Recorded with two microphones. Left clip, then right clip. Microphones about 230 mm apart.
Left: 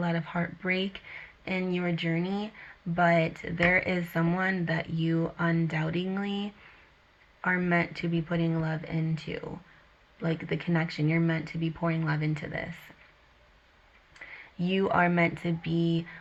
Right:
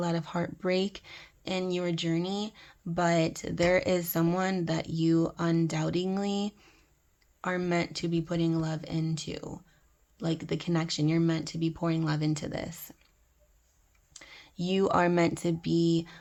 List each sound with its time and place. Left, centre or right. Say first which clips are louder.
0.0 s speech: even; right
14.7 s speech: even; right